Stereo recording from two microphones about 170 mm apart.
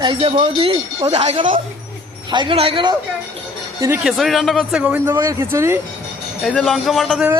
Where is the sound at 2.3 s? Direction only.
30° right (ahead or behind).